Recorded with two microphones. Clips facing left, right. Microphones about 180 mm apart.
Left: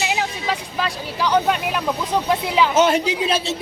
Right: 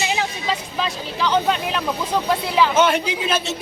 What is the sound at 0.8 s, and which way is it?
Speech, 10° left (ahead or behind).